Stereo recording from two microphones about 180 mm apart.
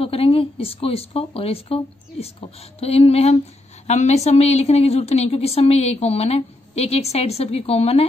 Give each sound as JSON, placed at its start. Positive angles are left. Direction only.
{"t": 0.0, "sound": "a woman's voice", "side_deg": 30}